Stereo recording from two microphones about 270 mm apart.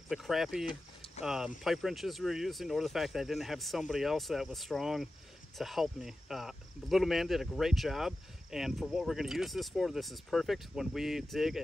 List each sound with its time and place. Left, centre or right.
0.1 s speech: centre
0.7 s a sound: centre
1.2 s speech: centre